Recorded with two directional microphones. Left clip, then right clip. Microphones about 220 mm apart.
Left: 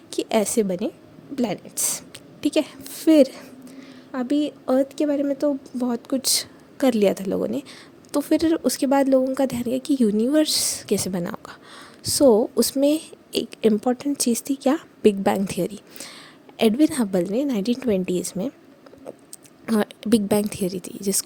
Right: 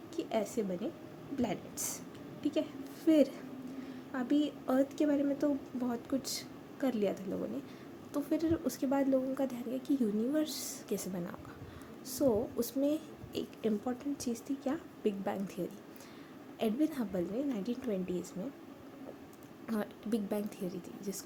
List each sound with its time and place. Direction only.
0.1 s a woman's voice: 50° left (ahead or behind)
19.6 s a woman's voice: 45° left (ahead or behind)